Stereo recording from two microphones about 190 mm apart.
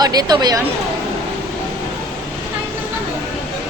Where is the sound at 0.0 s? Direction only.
20° right (ahead or behind).